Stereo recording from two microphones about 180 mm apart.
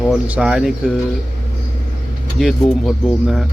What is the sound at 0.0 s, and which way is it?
Speech, 5° right (ahead or behind).